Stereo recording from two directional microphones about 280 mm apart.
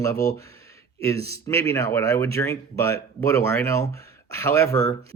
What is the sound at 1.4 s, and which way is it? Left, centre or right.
Speech, centre.